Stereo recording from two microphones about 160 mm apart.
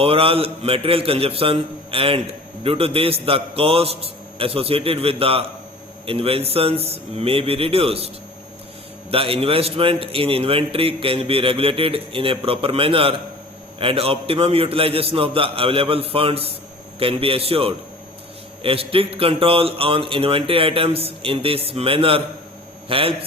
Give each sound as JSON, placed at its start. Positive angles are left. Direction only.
{"t": 0.0, "sound": "a man's voice", "side_deg": -35}